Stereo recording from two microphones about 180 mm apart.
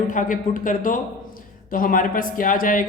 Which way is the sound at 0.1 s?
45° left (ahead or behind).